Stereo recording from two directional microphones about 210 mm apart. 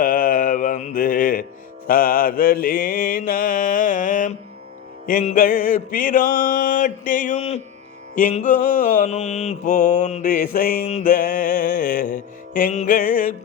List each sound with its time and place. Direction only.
0.0 s mantra: 40° left (ahead or behind)